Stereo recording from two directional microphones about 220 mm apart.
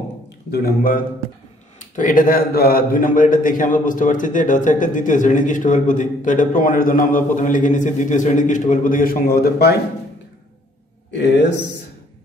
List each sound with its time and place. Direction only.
0.5 s a man's voice: 45° left (ahead or behind)
11.1 s a man's voice: 50° left (ahead or behind)